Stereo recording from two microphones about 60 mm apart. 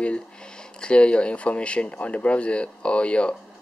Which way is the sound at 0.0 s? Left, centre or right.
Centre.